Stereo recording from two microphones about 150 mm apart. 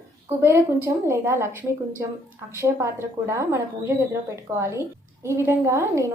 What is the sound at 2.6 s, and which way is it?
A woman's voice, 20° right (ahead or behind).